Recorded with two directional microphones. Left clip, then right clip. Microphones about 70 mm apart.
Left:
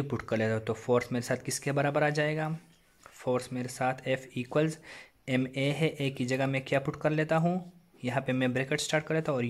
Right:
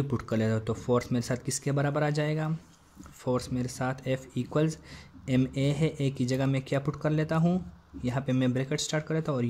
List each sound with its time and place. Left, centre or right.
0.1 s speech: right